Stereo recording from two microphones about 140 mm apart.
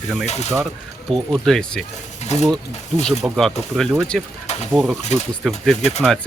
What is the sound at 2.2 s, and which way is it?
Speech, 55° left (ahead or behind).